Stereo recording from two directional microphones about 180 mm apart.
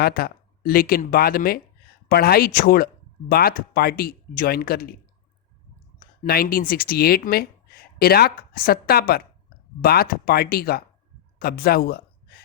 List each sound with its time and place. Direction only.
0.0 s speech: 60° left (ahead or behind)
6.0 s speech: 55° left (ahead or behind)